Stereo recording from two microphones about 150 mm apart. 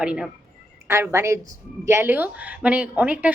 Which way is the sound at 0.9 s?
15° right (ahead or behind).